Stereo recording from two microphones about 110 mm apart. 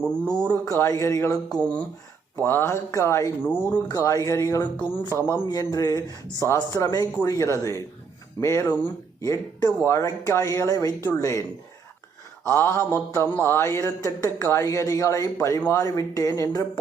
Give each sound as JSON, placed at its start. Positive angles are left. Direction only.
{"t": 0.0, "sound": "speech", "side_deg": 10}
{"t": 0.6, "sound": "speech", "side_deg": 30}
{"t": 1.5, "sound": "speech", "side_deg": 10}
{"t": 3.8, "sound": "speech", "side_deg": 30}
{"t": 5.5, "sound": "speech", "side_deg": 35}
{"t": 12.5, "sound": "speech", "side_deg": 20}